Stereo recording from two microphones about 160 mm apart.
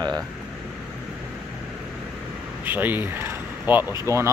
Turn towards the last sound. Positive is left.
turn(degrees=-15)  # may be behind; listen again after turning